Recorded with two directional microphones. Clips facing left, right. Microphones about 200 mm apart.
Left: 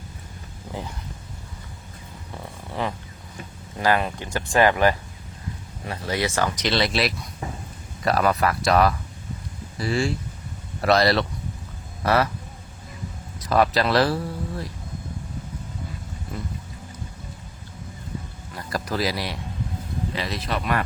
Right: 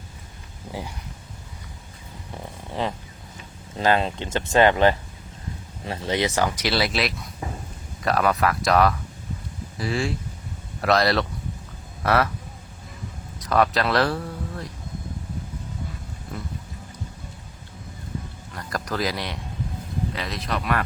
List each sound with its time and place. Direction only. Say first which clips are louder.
2.3 s a sound: right 1 dB; 20° right (ahead or behind)
3.8 s speech: right 1 dB; 25° right (ahead or behind); by 12.3 s centre (ahead or behind)
13.4 s speech: left 1 dB; 5° left (ahead or behind)
18.5 s speech: left 1 dB; 5° left (ahead or behind)